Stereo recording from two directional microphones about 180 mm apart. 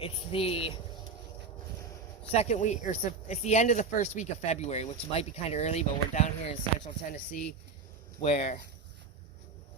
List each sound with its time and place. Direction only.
0.0 s speech: 30° left (ahead or behind)
2.3 s speech: 40° left (ahead or behind)
7.1 s speech: 50° left (ahead or behind)
8.2 s speech: 35° left (ahead or behind)